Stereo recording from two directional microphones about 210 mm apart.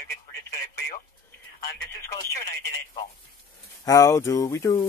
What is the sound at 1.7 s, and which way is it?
Speech, 15° left (ahead or behind).